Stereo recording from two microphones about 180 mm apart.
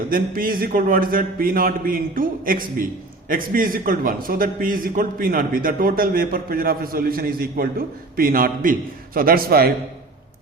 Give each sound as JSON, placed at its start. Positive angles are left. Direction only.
{"t": 0.1, "sound": "a man's voice", "side_deg": -50}